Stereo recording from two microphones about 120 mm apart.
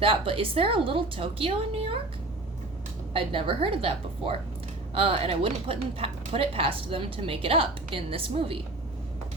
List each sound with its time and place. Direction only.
0.0 s a woman's voice: 50° right (ahead or behind)
3.1 s a woman's voice: 50° right (ahead or behind)